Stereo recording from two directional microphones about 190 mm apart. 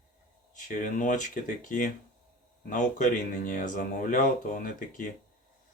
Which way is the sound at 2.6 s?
40° left (ahead or behind).